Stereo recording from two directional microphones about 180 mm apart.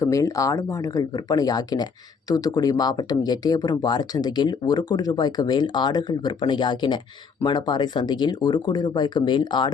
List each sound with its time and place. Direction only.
0.0 s speech: 15° left (ahead or behind)